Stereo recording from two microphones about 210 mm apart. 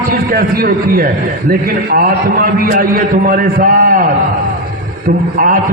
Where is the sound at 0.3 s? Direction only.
45° right (ahead or behind).